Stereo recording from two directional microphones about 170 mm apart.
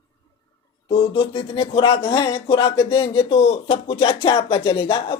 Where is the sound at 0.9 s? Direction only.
30° left (ahead or behind).